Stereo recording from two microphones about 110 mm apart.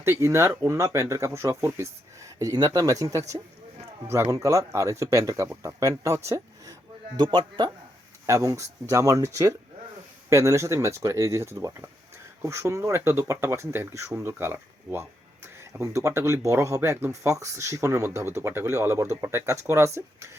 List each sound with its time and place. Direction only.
0.0 s speech: 25° right (ahead or behind)
7.2 s speech: 45° right (ahead or behind)
8.3 s speech: 30° right (ahead or behind)